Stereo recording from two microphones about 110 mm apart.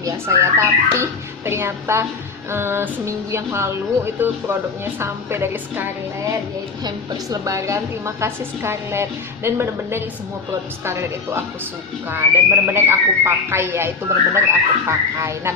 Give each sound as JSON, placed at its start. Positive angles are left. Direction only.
{"t": 0.0, "sound": "speech", "side_deg": -30}
{"t": 6.8, "sound": "speech", "side_deg": -30}